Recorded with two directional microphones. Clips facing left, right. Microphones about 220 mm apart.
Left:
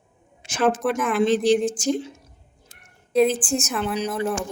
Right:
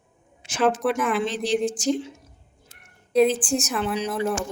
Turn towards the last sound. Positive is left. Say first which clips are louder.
# even
turn(degrees=0)  # may be behind; listen again after turning